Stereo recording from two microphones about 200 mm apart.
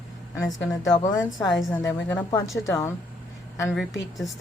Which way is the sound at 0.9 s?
20° left (ahead or behind).